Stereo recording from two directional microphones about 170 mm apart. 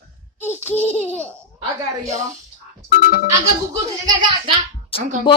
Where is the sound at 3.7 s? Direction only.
25° right (ahead or behind).